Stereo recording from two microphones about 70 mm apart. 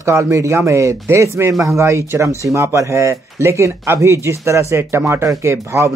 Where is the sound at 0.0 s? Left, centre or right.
Right.